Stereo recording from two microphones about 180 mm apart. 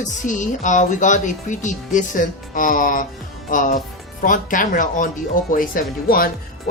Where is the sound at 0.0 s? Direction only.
45° left (ahead or behind).